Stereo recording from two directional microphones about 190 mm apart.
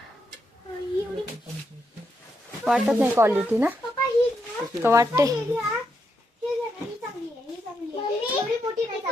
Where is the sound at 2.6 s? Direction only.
5° right (ahead or behind).